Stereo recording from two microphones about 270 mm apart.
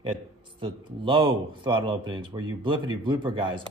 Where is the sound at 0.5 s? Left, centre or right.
Centre.